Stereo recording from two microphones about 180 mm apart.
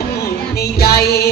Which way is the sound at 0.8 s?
60° left (ahead or behind).